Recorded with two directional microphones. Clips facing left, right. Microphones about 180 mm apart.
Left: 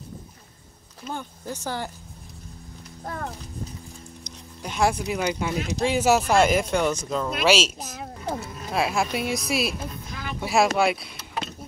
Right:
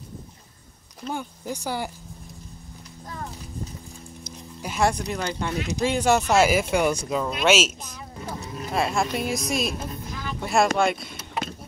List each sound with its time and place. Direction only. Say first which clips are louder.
1.1 s speech: right 2 dB; 15° right (ahead or behind)
4.2 s speech: right 3 dB; 5° right (ahead or behind)
7.9 s speech: left 4 dB; 70° left (ahead or behind)
8.4 s speech: right 2 dB; 5° left (ahead or behind)